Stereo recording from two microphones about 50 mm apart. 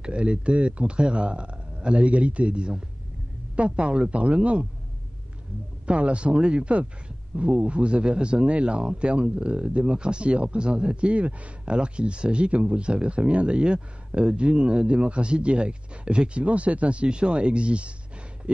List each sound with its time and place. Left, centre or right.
0.0 s speech: right
5.9 s speech: right